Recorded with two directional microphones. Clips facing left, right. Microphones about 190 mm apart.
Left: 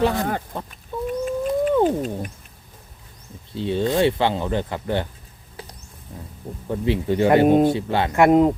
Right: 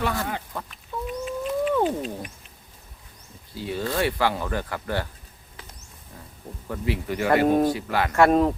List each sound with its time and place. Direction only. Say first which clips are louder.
0.0 s speech: left 6 dB; 25° left (ahead or behind)
1.0 s chicken: left 6 dB; 45° left (ahead or behind)
1.8 s cat: left 5 dB; 45° left (ahead or behind)
3.5 s speech: left 7 dB; 25° left (ahead or behind)
6.7 s speech: left 6 dB; 25° left (ahead or behind)